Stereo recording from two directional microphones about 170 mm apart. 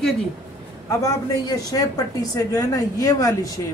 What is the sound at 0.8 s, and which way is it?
A woman's voice, 20° left (ahead or behind).